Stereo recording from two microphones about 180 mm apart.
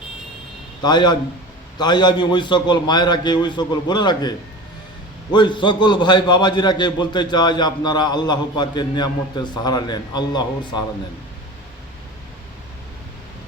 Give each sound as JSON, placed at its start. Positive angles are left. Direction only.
{"t": 0.8, "sound": "a man's voice", "side_deg": 25}